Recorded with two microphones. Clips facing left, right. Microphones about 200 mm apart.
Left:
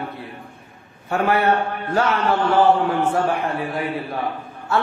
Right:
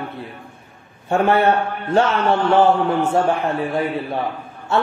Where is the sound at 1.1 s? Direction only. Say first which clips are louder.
Right 3 dB; 25° right (ahead or behind).